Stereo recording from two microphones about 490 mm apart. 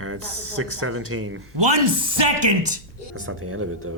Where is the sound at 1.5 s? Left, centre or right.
Right.